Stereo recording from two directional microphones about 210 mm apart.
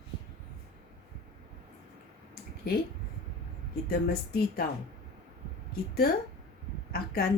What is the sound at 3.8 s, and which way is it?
Speech, 45° left (ahead or behind).